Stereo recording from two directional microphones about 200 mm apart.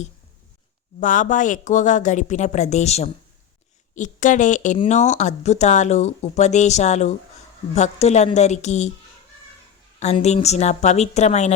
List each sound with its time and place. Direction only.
0.9 s speech: 40° left (ahead or behind)
10.0 s speech: 35° left (ahead or behind)